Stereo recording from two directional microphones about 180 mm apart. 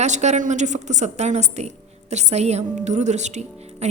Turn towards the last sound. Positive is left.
turn(degrees=-40)  # may be behind; listen again after turning